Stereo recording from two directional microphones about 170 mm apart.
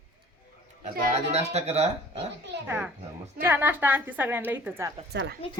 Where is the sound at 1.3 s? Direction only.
40° right (ahead or behind).